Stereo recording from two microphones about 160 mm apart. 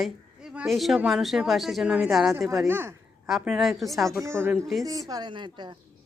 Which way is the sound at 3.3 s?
Centre (ahead or behind).